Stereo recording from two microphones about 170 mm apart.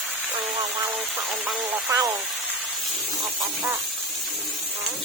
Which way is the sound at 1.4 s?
15° right (ahead or behind).